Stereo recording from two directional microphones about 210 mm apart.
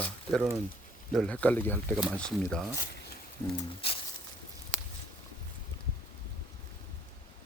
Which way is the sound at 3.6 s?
25° left (ahead or behind).